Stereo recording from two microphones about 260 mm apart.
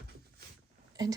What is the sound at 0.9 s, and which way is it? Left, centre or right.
Speech, centre.